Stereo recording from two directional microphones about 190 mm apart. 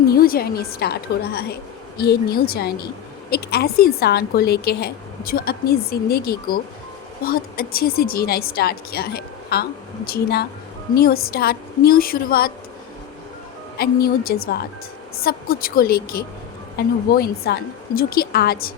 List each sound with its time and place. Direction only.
0.1 s a woman's voice: 50° left (ahead or behind)
13.7 s a woman's voice: 55° left (ahead or behind)